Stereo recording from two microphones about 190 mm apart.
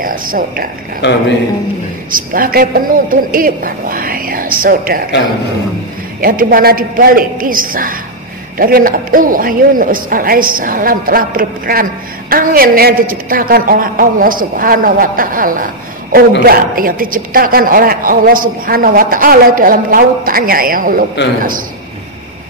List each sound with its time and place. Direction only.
0.0 s a man's voice: 50° right (ahead or behind)
1.0 s a man's voice: 65° left (ahead or behind)
2.0 s a man's voice: 45° right (ahead or behind)
6.2 s a man's voice: 50° right (ahead or behind)